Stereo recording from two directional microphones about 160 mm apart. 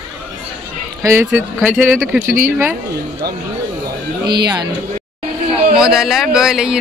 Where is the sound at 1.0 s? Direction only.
15° right (ahead or behind).